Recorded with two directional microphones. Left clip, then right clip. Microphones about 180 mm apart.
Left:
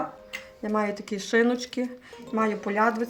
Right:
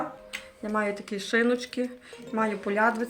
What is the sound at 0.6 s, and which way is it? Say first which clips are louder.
Speech: left 1 dB; 60° left (ahead or behind).